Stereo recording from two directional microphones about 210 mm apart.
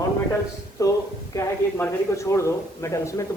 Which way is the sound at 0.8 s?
15° left (ahead or behind).